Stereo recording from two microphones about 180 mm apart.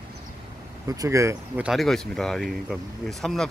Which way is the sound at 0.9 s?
15° right (ahead or behind).